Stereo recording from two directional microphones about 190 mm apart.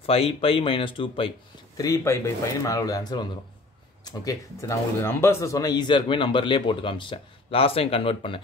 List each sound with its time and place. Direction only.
0.0 s speech: 30° left (ahead or behind)
1.8 s speech: 15° left (ahead or behind)